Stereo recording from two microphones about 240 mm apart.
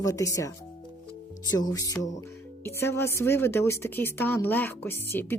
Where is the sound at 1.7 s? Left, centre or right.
Centre.